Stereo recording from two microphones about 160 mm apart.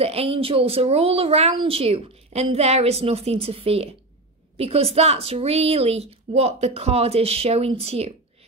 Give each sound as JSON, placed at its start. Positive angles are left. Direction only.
{"t": 0.0, "sound": "a woman's voice", "side_deg": -40}